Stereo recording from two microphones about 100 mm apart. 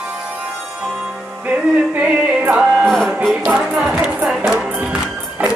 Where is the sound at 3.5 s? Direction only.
10° right (ahead or behind).